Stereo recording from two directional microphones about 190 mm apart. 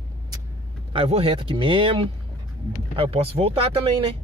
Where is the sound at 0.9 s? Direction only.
30° right (ahead or behind).